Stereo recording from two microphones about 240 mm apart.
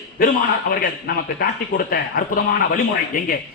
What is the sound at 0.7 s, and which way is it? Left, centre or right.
Speech, left.